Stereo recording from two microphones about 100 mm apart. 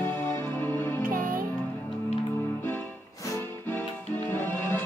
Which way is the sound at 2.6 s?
20° left (ahead or behind).